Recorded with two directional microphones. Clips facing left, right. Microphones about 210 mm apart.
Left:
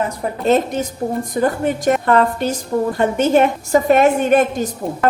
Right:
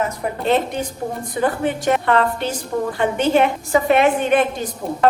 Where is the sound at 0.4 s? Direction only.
40° left (ahead or behind).